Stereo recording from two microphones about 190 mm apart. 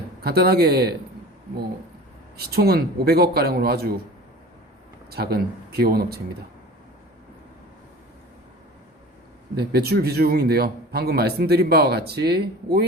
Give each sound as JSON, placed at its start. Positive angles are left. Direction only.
{"t": 0.2, "sound": "speech", "side_deg": -55}
{"t": 2.5, "sound": "speech", "side_deg": -55}
{"t": 5.1, "sound": "speech", "side_deg": -55}
{"t": 9.6, "sound": "speech", "side_deg": -55}